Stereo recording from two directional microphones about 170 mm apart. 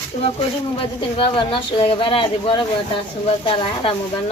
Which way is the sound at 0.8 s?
30° left (ahead or behind).